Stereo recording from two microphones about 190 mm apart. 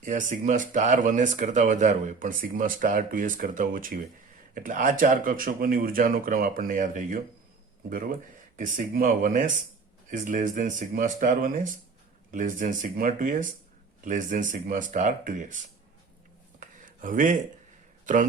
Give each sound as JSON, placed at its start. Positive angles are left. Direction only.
{"t": 0.0, "sound": "speech", "side_deg": -40}
{"t": 16.6, "sound": "a sound", "side_deg": -45}
{"t": 18.0, "sound": "a man's voice", "side_deg": -40}